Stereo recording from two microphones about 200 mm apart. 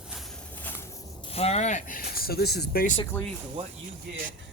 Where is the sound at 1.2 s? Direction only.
30° left (ahead or behind); by 3.0 s 45° left (ahead or behind).